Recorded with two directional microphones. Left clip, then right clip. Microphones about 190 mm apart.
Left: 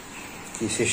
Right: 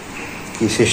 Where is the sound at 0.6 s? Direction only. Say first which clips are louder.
Right 9 dB; 10° left (ahead or behind).